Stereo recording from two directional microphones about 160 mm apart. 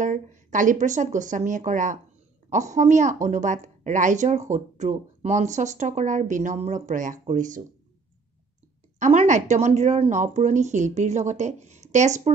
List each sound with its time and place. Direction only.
0.0 s a woman's voice: 50° right (ahead or behind)
9.0 s a woman's voice: 50° right (ahead or behind)